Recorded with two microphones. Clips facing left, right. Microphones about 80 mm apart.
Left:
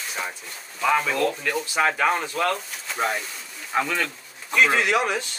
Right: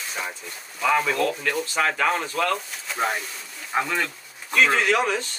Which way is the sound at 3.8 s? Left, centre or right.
Centre.